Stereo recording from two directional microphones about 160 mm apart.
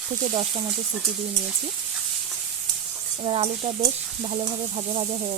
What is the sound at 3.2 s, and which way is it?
Sizzle, 40° right (ahead or behind).